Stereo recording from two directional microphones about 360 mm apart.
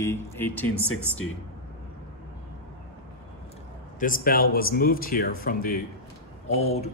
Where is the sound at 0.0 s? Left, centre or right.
Centre.